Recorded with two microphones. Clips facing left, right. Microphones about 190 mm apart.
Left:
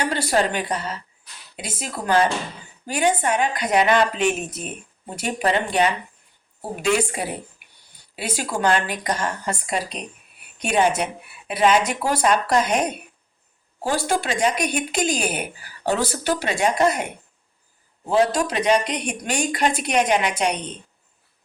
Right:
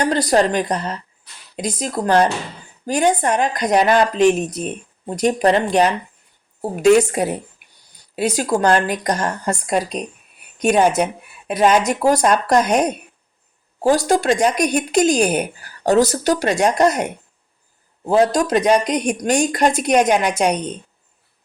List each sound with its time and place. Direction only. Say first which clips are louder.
0.0 s speech: right 5 dB; 40° right (ahead or behind)
18.1 s speech: right 4 dB; 40° right (ahead or behind)